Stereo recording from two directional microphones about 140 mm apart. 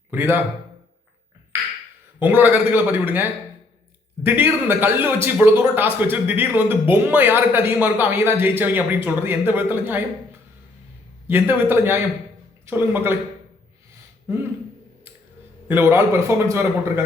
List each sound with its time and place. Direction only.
0.1 s a man's voice: 15° right (ahead or behind)
2.2 s a man's voice: 15° right (ahead or behind)
11.3 s a man's voice: 15° right (ahead or behind)
15.6 s a man's voice: 15° right (ahead or behind)